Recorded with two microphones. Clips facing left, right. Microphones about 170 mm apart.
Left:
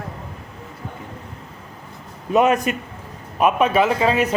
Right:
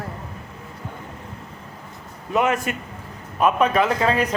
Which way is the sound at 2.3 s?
20° left (ahead or behind).